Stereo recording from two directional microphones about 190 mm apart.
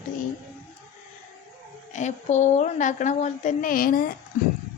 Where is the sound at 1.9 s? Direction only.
40° left (ahead or behind).